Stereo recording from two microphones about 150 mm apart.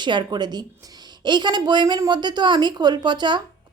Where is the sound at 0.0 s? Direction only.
30° right (ahead or behind).